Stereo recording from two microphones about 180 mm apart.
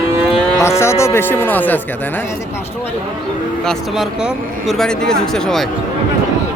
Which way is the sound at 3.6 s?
Centre (ahead or behind).